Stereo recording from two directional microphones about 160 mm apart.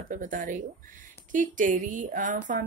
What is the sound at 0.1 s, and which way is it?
A woman's voice, 55° right (ahead or behind).